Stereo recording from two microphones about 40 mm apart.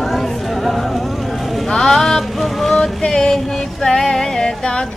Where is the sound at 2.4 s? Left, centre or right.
Centre.